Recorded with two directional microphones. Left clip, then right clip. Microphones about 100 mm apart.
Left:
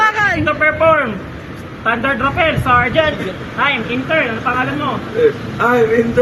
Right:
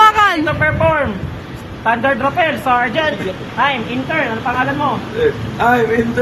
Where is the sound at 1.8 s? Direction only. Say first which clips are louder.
Right 1 dB; 45° right (ahead or behind).